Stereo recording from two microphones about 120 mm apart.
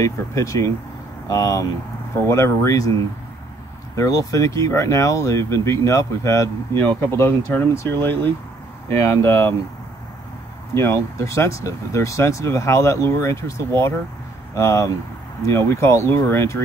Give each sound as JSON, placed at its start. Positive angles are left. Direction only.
{"t": 0.0, "sound": "speech", "side_deg": 25}
{"t": 3.9, "sound": "speech", "side_deg": 25}
{"t": 10.7, "sound": "speech", "side_deg": 20}